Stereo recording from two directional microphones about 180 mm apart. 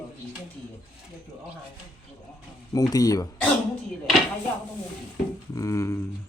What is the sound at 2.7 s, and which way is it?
Speech, 20° left (ahead or behind).